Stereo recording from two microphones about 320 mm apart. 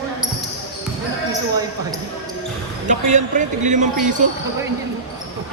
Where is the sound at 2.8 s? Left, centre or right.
Right.